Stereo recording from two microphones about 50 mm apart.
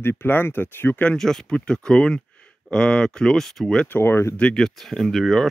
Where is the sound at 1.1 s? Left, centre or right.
Centre.